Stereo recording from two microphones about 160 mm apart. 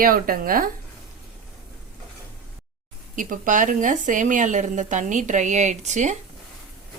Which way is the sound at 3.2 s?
55° right (ahead or behind).